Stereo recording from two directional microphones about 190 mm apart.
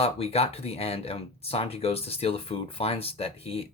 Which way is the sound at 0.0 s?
30° left (ahead or behind).